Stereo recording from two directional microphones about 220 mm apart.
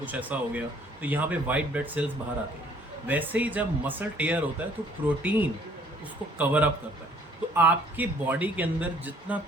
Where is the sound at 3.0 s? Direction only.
10° right (ahead or behind).